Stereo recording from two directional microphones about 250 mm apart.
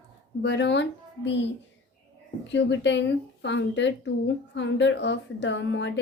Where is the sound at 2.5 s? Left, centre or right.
Left.